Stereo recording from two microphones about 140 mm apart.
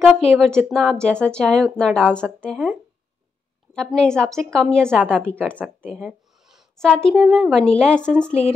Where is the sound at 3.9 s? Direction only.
5° left (ahead or behind).